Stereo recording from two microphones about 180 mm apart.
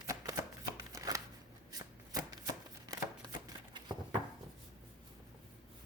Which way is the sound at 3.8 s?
25° right (ahead or behind).